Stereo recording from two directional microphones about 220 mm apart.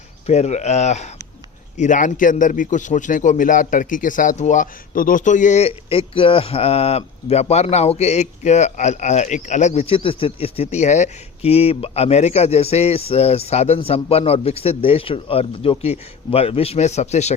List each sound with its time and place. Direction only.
0.3 s a man's voice: 30° left (ahead or behind)